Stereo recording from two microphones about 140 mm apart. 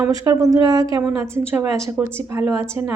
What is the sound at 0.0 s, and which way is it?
A woman's voice, 25° right (ahead or behind).